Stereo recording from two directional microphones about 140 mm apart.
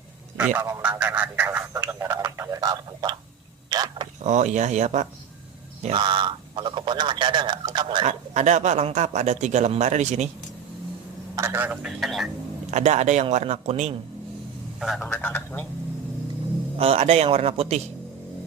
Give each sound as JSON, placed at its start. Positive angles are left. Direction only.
{"t": 0.3, "sound": "a man's voice", "side_deg": -10}
{"t": 0.9, "sound": "speech", "side_deg": -10}
{"t": 3.7, "sound": "a sound", "side_deg": -30}
{"t": 4.2, "sound": "a man's voice", "side_deg": -55}
{"t": 5.8, "sound": "a man's voice", "side_deg": -40}
{"t": 8.0, "sound": "a man's voice", "side_deg": -55}
{"t": 11.3, "sound": "speech", "side_deg": -15}
{"t": 12.7, "sound": "a man's voice", "side_deg": -55}
{"t": 14.8, "sound": "speech", "side_deg": 0}
{"t": 15.0, "sound": "speech", "side_deg": 15}
{"t": 16.7, "sound": "a man's voice", "side_deg": -45}